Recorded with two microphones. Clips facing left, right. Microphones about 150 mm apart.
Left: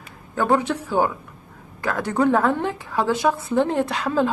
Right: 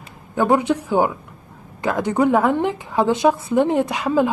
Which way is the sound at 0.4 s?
15° right (ahead or behind).